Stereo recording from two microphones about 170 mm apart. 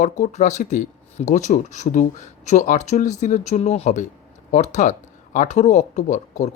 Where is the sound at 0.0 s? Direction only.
45° left (ahead or behind).